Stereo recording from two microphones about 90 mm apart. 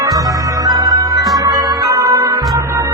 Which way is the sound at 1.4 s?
45° right (ahead or behind).